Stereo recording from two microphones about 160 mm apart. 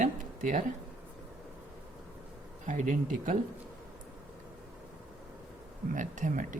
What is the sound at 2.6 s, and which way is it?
Speech, 55° right (ahead or behind).